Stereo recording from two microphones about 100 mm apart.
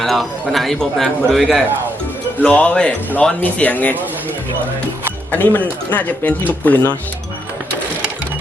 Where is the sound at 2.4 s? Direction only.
15° left (ahead or behind).